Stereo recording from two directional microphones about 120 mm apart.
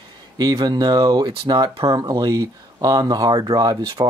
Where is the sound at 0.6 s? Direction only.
35° right (ahead or behind).